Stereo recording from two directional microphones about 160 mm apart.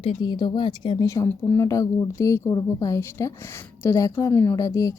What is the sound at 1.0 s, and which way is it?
A woman's voice, 20° left (ahead or behind).